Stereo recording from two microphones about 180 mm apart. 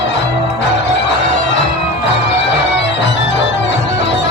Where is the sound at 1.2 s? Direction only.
80° left.